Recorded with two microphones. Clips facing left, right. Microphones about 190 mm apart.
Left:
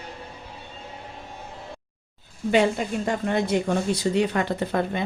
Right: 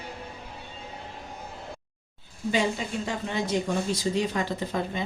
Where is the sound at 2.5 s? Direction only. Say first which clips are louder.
Left 6 dB; 55° left (ahead or behind).